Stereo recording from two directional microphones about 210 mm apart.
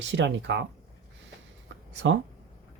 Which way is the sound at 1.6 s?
60° right (ahead or behind).